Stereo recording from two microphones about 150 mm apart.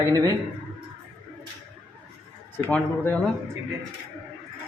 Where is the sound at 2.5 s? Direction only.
15° left (ahead or behind).